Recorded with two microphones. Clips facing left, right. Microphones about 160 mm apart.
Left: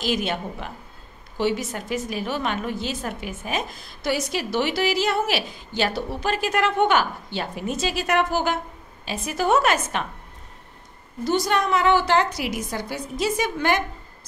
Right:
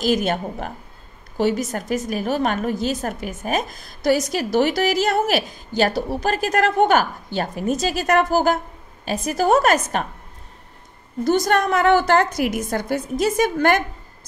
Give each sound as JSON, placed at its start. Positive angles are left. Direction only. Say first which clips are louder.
{"t": 0.0, "sound": "a woman's voice", "louder": "right 5 dB", "side_deg": -45}
{"t": 11.2, "sound": "a woman's voice", "louder": "right 4 dB", "side_deg": -45}